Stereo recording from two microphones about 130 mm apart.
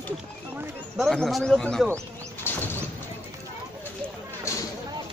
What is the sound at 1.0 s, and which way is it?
Speech, centre (ahead or behind).